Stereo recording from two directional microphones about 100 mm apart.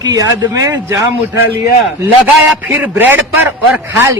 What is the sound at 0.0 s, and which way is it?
Speech, 40° right (ahead or behind).